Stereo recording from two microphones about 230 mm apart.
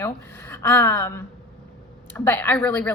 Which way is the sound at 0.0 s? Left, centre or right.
Centre.